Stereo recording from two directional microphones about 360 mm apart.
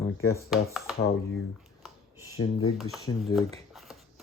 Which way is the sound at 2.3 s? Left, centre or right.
Left.